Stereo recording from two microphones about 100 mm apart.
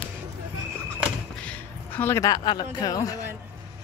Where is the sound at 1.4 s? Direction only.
20° left (ahead or behind).